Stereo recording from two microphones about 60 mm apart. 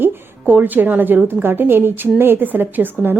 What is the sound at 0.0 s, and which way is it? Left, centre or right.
A woman's voice, right.